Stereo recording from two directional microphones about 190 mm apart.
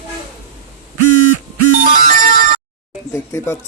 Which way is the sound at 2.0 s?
50° right (ahead or behind).